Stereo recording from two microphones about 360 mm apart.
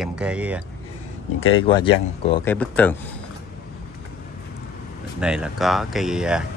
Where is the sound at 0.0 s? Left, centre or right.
Centre.